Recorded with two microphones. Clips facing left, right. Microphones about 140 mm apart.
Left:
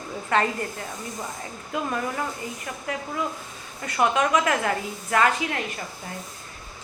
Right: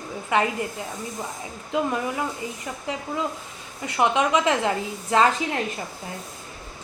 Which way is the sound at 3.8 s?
20° right (ahead or behind).